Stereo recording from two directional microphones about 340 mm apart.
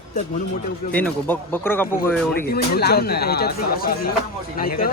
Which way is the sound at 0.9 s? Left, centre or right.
Centre.